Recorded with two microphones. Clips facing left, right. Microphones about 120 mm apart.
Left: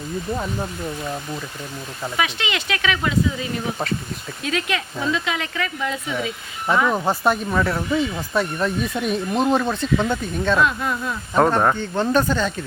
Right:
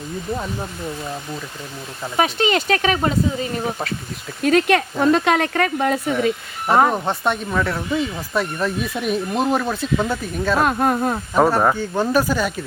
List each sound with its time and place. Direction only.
0.3 s speech: centre (ahead or behind)
2.1 s speech: 40° right (ahead or behind)
4.4 s speech: 50° right (ahead or behind)
6.9 s speech: 5° left (ahead or behind)
10.6 s speech: 50° right (ahead or behind)
11.3 s speech: 5° right (ahead or behind)